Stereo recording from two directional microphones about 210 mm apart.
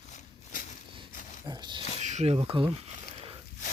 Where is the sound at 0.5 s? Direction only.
40° left (ahead or behind).